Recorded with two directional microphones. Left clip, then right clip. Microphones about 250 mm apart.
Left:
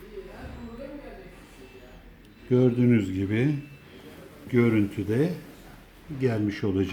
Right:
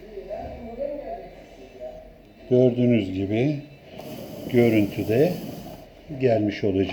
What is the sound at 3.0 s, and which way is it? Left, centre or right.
Speech, left.